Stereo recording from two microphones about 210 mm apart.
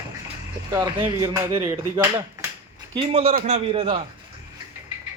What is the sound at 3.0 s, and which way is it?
A man's voice, 25° right (ahead or behind).